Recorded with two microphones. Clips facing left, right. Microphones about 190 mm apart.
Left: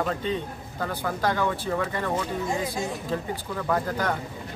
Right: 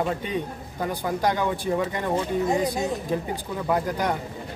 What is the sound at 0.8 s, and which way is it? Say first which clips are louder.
Speech: right 2 dB; 15° right (ahead or behind).